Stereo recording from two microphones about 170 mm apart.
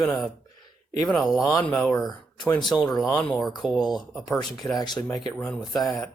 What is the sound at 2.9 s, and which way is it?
Speech, 20° left (ahead or behind).